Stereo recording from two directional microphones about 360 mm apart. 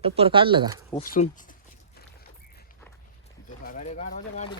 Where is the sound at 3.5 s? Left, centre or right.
Left.